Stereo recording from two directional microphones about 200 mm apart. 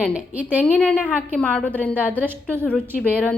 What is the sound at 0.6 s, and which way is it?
A woman's voice, 5° left (ahead or behind).